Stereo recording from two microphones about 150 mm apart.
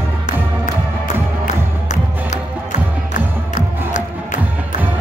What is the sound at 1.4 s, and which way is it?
Music, 55° left (ahead or behind).